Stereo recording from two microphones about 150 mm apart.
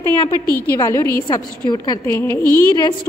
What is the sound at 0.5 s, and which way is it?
A woman's voice, 15° left (ahead or behind).